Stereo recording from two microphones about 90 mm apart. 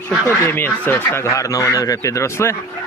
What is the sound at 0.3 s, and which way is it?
Speech, 25° left (ahead or behind).